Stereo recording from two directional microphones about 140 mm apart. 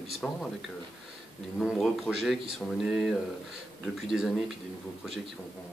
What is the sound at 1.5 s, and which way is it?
Speech, centre (ahead or behind).